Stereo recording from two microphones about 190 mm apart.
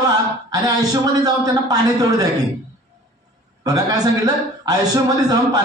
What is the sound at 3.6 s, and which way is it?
Speech, 20° right (ahead or behind).